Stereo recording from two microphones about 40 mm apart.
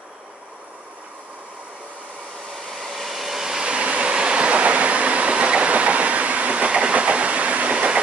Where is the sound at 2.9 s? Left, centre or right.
Centre.